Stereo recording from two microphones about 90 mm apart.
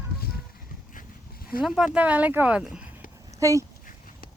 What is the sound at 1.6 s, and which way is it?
Speech, 5° right (ahead or behind).